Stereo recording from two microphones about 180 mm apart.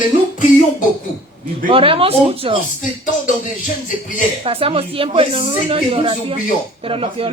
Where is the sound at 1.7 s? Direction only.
30° right (ahead or behind).